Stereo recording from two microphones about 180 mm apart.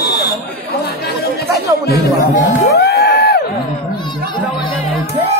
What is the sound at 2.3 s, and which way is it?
Music, 60° left (ahead or behind).